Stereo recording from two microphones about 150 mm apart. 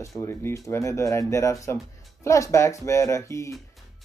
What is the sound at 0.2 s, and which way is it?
Speech, 15° left (ahead or behind).